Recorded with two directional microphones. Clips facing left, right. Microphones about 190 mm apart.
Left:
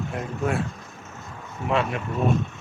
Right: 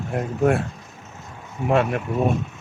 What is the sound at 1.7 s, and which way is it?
Speech, 50° right (ahead or behind).